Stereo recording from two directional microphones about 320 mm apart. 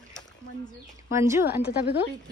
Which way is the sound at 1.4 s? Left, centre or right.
Left.